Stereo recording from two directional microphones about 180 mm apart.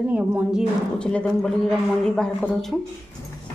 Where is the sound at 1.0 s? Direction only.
5° left (ahead or behind).